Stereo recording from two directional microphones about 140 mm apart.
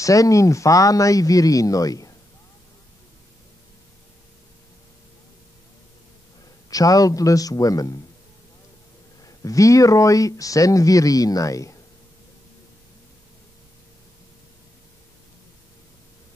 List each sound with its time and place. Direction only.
0.0 s speech: 25° left (ahead or behind)
6.7 s speech: 25° left (ahead or behind)
9.2 s speech: 25° left (ahead or behind)